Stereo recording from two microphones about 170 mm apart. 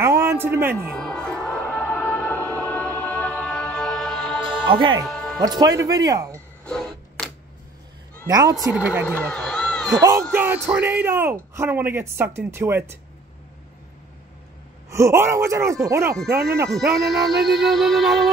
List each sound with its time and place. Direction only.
0.0 s music: 15° right (ahead or behind)
0.9 s music: 5° left (ahead or behind)
4.6 s speech: 30° right (ahead or behind)
5.0 s music: centre (ahead or behind)
5.4 s speech: 20° right (ahead or behind)
6.6 s a sound: 5° left (ahead or behind)
8.3 s speech: 20° right (ahead or behind)
8.7 s speech: 10° right (ahead or behind)
9.0 s speech: 10° left (ahead or behind)
10.3 s speech: 10° right (ahead or behind)
14.9 s speech: 15° right (ahead or behind)
16.7 s music: centre (ahead or behind)